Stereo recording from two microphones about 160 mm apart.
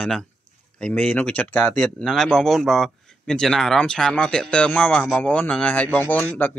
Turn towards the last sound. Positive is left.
turn(degrees=10)  # may be behind; listen again after turning